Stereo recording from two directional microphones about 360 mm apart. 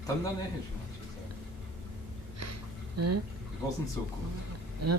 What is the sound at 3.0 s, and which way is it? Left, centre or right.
Speech, right.